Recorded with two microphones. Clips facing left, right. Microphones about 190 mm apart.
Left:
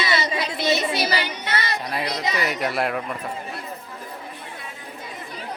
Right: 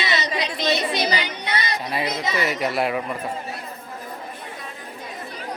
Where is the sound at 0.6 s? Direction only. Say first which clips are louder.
Left 1 dB; 10° left (ahead or behind).